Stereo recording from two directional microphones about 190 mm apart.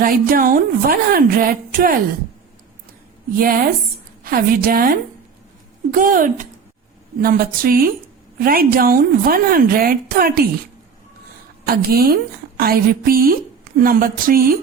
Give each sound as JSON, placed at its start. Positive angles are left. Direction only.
{"t": 0.0, "sound": "a woman's voice", "side_deg": -50}
{"t": 3.3, "sound": "a woman's voice", "side_deg": -50}
{"t": 11.6, "sound": "a woman's voice", "side_deg": -50}